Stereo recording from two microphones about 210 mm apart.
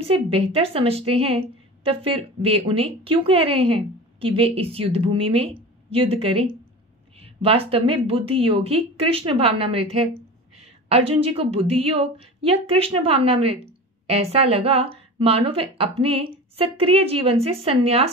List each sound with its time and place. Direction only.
0.1 s a woman's voice: 30° right (ahead or behind)